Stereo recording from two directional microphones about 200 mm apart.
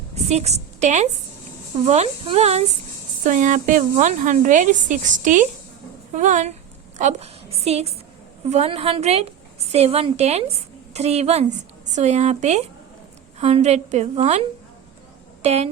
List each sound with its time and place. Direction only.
0.1 s a woman's voice: 35° right (ahead or behind)